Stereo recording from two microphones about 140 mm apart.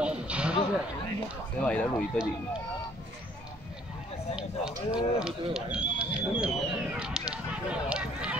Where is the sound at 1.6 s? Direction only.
10° left (ahead or behind).